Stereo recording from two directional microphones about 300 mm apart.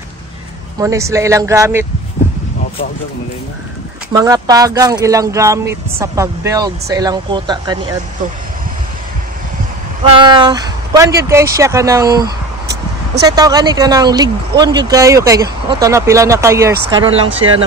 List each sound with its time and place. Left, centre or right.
0.7 s speech: centre
4.1 s speech: centre
10.0 s speech: centre